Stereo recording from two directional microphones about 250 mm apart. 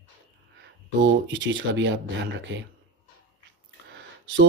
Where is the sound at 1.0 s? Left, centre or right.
Right.